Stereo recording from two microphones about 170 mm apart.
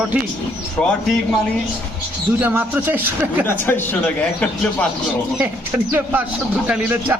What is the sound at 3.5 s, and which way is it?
Speech, 10° left (ahead or behind).